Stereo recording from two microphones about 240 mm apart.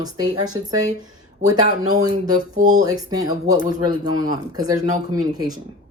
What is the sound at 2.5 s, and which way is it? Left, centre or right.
Speech, right.